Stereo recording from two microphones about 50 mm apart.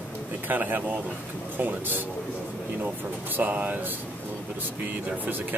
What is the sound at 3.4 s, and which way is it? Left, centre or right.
Speech, right.